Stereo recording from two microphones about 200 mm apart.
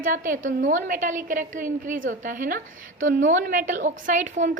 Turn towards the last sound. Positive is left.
turn(degrees=-40)  # may be behind; listen again after turning